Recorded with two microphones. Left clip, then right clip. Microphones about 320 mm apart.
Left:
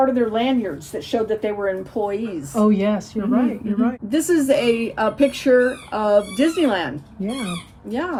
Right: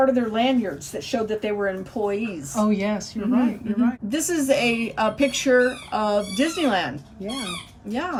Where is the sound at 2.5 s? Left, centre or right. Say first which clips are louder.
Left 5 dB; centre.